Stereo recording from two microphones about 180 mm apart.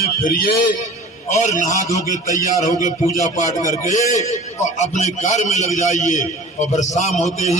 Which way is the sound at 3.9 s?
45° left (ahead or behind).